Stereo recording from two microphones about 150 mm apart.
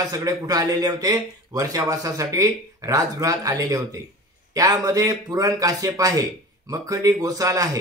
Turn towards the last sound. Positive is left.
turn(degrees=-25)  # may be behind; listen again after turning